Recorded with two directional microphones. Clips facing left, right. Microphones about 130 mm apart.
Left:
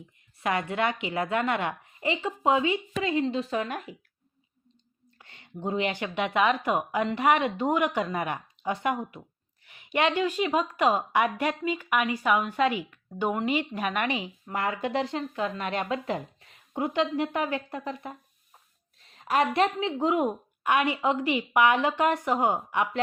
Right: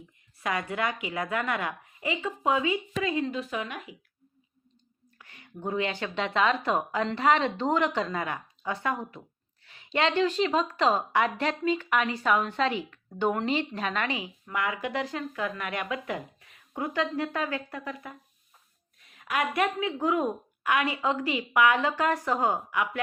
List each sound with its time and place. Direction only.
0.3 s a woman's voice: 25° left (ahead or behind)
5.1 s a woman's voice: 25° left (ahead or behind)
14.5 s a woman's voice: 35° left (ahead or behind)